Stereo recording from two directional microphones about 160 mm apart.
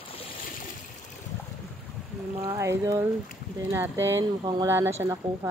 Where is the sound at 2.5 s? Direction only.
15° right (ahead or behind).